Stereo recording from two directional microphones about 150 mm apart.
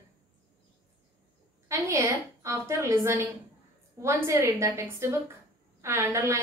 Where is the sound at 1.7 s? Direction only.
20° right (ahead or behind).